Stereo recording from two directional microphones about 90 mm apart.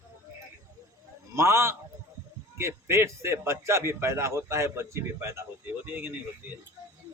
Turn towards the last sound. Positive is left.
turn(degrees=-20)  # may be behind; listen again after turning